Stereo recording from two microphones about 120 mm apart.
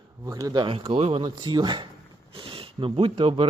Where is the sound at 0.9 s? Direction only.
60° right (ahead or behind).